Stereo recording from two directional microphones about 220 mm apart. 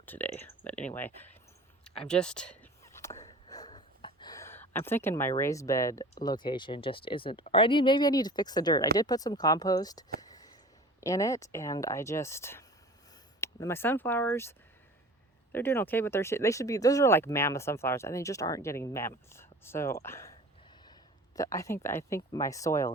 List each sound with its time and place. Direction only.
0.0 s a sound: 10° left (ahead or behind)
0.9 s speech: 10° left (ahead or behind)
2.0 s whispering: 5° left (ahead or behind)
6.2 s speech: 20° left (ahead or behind)
10.2 s a sound: 15° left (ahead or behind)
11.0 s speech: 15° left (ahead or behind)
15.5 s speech: 10° left (ahead or behind)
21.3 s speech: 15° left (ahead or behind)